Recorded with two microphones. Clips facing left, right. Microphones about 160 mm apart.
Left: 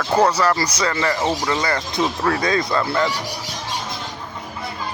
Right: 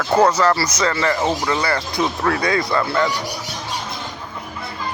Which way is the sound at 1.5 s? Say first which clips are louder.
Right 1 dB; 20° left (ahead or behind).